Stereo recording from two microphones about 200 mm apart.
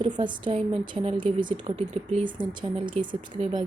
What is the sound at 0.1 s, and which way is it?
A woman's voice, 25° right (ahead or behind).